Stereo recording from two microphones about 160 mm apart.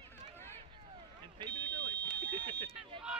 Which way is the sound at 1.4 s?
30° right (ahead or behind).